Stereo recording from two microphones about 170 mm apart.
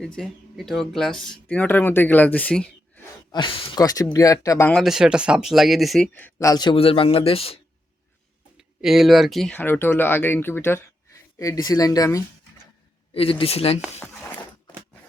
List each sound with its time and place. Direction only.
0.0 s speech: 5° left (ahead or behind)
3.3 s speech: 25° left (ahead or behind)
4.7 s speech: centre (ahead or behind)
6.1 s speech: 10° left (ahead or behind)
6.5 s a man's voice: 25° left (ahead or behind)
8.5 s speech: 5° right (ahead or behind); by 12.2 s 20° left (ahead or behind)
13.1 s a man's voice: 35° left (ahead or behind)
14.0 s a sound: 10° left (ahead or behind)